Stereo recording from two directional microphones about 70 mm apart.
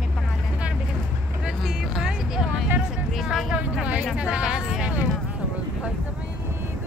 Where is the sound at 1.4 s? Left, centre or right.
Centre.